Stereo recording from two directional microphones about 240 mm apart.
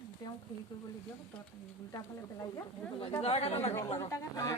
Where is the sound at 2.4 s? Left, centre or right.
Centre.